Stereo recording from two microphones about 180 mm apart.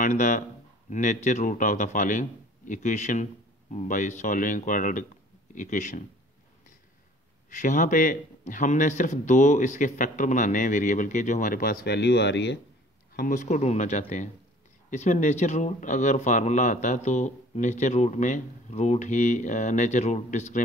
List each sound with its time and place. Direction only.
0.0 s a man's voice: 45° left (ahead or behind)
7.4 s a man's voice: 45° left (ahead or behind); by 12.5 s 75° left (ahead or behind)
13.1 s speech: 50° left (ahead or behind)